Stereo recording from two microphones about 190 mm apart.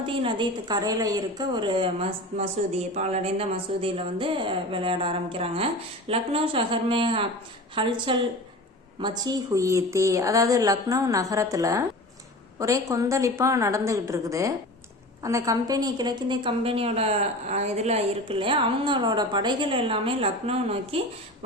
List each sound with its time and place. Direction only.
0.0 s a woman's voice: 25° right (ahead or behind)